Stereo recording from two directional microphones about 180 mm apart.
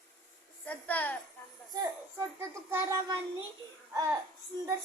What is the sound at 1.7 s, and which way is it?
A child's voice, 20° right (ahead or behind).